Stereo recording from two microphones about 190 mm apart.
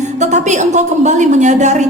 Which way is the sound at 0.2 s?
35° right (ahead or behind).